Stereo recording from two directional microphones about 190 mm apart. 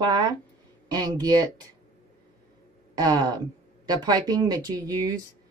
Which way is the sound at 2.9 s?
20° right (ahead or behind).